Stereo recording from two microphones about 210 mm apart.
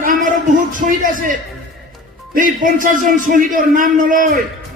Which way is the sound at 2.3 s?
40° right (ahead or behind).